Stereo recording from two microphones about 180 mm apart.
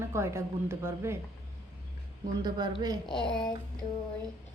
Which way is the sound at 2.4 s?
25° right (ahead or behind).